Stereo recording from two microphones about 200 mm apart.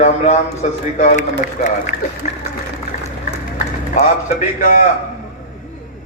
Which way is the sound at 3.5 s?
40° left (ahead or behind).